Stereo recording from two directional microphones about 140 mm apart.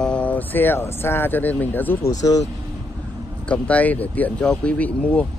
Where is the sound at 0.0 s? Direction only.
10° left (ahead or behind).